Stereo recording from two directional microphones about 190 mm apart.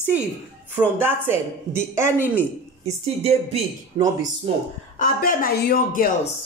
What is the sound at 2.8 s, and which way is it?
A woman's voice, 30° right (ahead or behind).